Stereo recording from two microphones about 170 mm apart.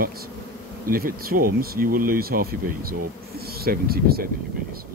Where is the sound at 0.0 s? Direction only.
60° right (ahead or behind).